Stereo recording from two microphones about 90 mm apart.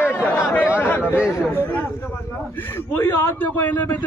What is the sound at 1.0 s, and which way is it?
Speech, 15° right (ahead or behind).